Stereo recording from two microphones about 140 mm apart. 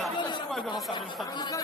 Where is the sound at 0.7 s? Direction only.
35° left (ahead or behind).